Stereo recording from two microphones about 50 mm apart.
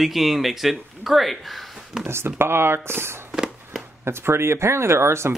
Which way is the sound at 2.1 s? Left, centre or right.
Right.